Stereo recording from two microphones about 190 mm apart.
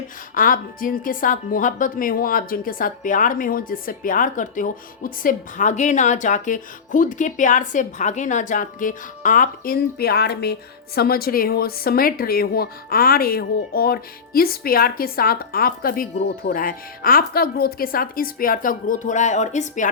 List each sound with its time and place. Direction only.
0.3 s a woman's voice: 45° left (ahead or behind)